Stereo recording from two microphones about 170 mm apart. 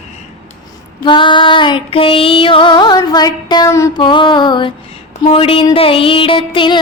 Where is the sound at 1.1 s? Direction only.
30° left (ahead or behind).